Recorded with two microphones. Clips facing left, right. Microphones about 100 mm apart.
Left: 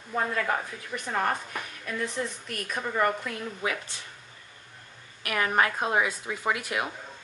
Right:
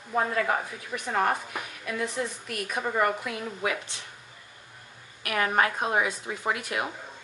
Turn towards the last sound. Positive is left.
turn(degrees=-20)  # may be behind; listen again after turning